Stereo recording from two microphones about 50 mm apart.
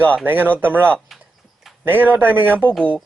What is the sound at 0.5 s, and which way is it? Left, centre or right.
Speech, right.